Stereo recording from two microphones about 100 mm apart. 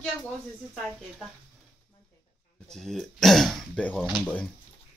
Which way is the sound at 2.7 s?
5° left (ahead or behind).